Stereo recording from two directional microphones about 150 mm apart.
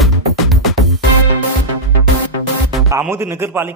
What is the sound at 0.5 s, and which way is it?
Music, centre (ahead or behind).